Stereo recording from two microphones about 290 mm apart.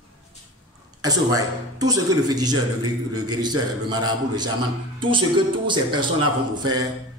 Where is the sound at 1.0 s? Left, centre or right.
Centre.